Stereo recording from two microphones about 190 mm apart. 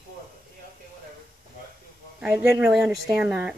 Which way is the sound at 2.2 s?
5° right (ahead or behind).